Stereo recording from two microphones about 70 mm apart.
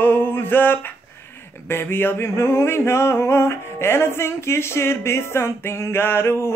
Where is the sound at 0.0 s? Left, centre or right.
Left.